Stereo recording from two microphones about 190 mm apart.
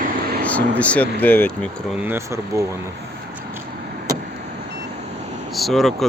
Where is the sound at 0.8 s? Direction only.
5° left (ahead or behind).